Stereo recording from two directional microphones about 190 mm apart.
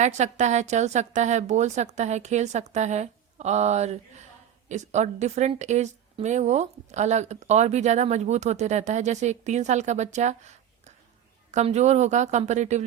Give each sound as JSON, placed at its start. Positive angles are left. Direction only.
{"t": 0.0, "sound": "a woman's voice", "side_deg": -40}